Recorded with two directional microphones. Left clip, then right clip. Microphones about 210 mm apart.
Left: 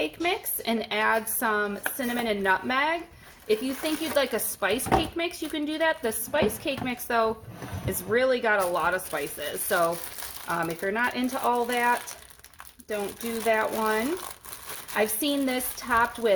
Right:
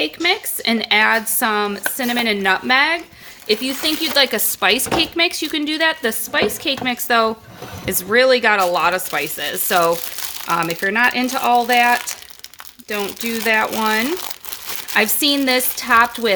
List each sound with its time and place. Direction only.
0.0 s a woman's voice: 50° right (ahead or behind)
13.4 s a woman's voice: 60° right (ahead or behind)